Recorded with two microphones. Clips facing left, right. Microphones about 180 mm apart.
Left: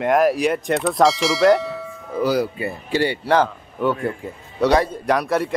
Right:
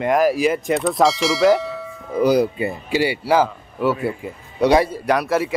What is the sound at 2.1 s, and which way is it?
Speech, 20° right (ahead or behind).